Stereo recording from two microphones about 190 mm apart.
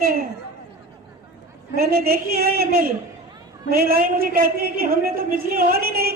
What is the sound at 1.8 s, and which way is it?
A woman's voice, 50° right (ahead or behind).